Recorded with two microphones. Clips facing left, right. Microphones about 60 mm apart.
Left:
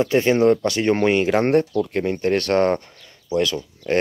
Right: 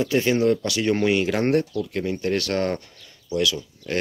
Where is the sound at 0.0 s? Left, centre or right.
Left.